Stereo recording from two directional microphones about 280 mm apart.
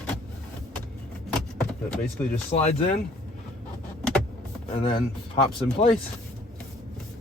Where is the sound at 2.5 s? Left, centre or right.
Left.